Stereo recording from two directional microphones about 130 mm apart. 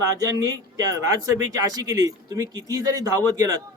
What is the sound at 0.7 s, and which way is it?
Speech, 25° right (ahead or behind).